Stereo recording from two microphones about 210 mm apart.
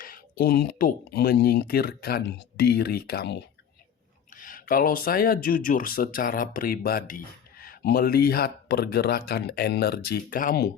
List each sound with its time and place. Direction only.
0.0 s speech: 45° left (ahead or behind)
4.4 s speech: 40° left (ahead or behind)